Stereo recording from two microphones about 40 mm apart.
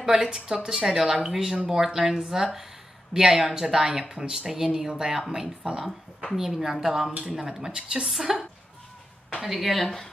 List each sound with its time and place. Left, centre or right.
0.0 s speech: centre
6.3 s a woman's voice: centre